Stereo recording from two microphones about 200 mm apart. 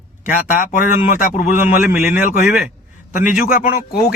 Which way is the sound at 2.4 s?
Centre (ahead or behind).